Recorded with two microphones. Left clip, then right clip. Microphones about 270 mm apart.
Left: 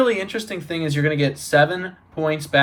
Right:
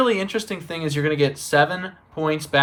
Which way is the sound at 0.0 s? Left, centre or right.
Centre.